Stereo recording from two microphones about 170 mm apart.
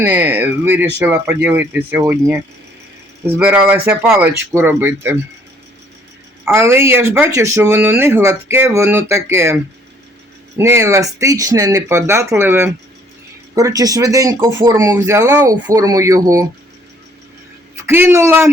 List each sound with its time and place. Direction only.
0.0 s speech: 10° right (ahead or behind)
6.4 s a woman's voice: 15° right (ahead or behind)
10.6 s speech: 15° right (ahead or behind)
17.8 s speech: 15° right (ahead or behind)